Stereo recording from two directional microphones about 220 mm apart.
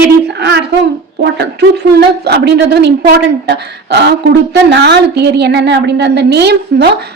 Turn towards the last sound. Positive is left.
turn(degrees=-50)  # may be behind; listen again after turning